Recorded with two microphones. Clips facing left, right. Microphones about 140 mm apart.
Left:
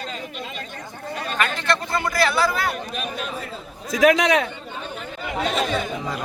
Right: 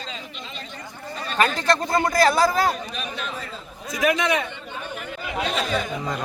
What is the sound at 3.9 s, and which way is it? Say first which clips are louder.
Speech: left 5 dB; 90° left.